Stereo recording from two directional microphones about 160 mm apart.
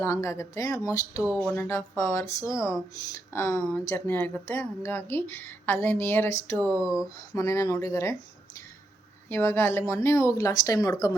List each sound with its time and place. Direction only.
0.0 s a woman's voice: 20° left (ahead or behind)
6.8 s a sound: 5° right (ahead or behind)
7.3 s a woman's voice: 20° left (ahead or behind)
9.3 s a woman's voice: 15° left (ahead or behind)